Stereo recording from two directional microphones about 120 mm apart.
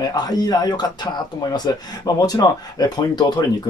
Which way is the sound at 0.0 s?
35° left (ahead or behind).